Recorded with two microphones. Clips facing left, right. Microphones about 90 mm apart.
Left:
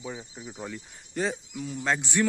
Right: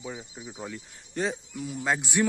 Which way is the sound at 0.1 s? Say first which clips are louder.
Even; 5° right (ahead or behind).